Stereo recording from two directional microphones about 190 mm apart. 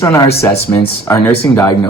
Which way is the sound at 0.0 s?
15° left (ahead or behind).